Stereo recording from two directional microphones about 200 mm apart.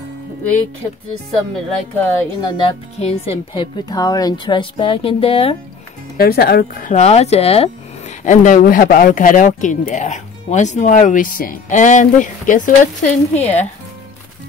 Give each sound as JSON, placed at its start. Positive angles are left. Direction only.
{"t": 2.5, "sound": "speech", "side_deg": 30}
{"t": 3.9, "sound": "speech", "side_deg": 20}
{"t": 6.1, "sound": "speech", "side_deg": 50}
{"t": 6.9, "sound": "speech", "side_deg": 35}